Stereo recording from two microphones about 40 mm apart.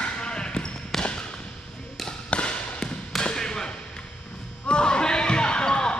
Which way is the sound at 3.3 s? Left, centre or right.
Centre.